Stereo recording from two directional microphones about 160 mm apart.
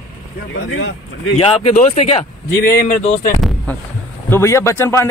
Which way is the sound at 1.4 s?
45° left (ahead or behind).